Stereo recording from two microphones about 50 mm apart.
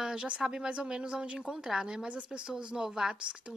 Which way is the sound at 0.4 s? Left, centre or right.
Centre.